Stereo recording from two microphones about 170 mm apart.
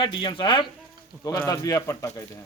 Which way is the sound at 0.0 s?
30° left (ahead or behind).